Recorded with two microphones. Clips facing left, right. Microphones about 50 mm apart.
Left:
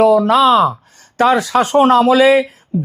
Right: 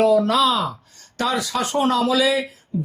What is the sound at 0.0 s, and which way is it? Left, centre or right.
Speech, left.